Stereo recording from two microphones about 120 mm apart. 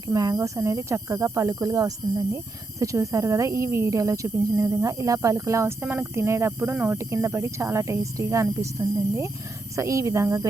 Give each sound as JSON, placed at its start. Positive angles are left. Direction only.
{"t": 0.1, "sound": "speech", "side_deg": -30}